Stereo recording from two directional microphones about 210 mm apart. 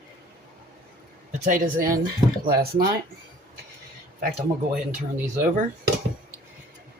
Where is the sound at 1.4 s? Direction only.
40° right (ahead or behind).